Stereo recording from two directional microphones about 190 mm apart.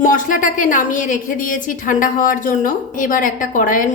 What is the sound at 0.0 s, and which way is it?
A woman's voice, 45° left (ahead or behind).